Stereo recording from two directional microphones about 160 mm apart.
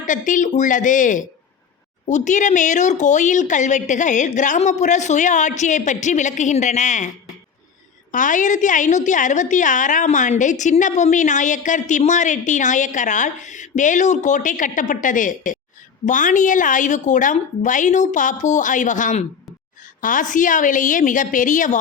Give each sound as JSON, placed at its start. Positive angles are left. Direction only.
{"t": 0.0, "sound": "a woman's voice", "side_deg": 55}
{"t": 8.1, "sound": "a woman's voice", "side_deg": 55}